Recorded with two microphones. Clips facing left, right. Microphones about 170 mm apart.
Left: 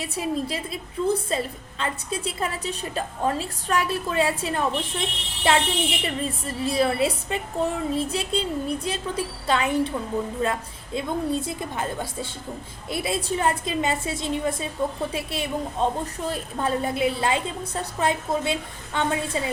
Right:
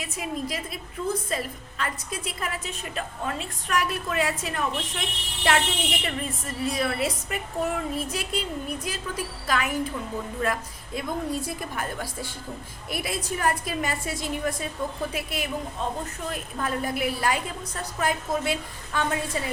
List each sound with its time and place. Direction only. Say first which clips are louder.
0.0 s a woman's voice: left 4 dB; 30° left (ahead or behind)